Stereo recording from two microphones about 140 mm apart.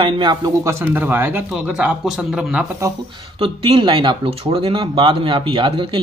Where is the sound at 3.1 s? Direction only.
40° right (ahead or behind).